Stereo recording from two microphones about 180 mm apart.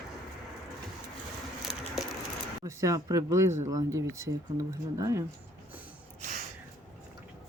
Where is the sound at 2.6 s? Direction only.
20° right (ahead or behind).